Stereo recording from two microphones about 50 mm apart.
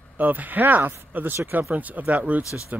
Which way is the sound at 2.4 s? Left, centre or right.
Left.